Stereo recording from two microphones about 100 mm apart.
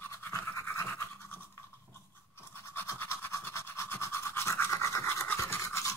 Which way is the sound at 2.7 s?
20° left (ahead or behind).